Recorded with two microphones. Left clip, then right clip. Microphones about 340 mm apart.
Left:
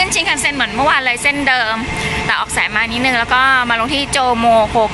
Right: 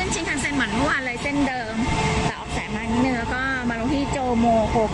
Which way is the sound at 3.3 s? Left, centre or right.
Centre.